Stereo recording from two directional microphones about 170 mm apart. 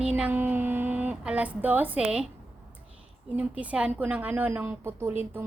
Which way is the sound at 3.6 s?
10° right (ahead or behind).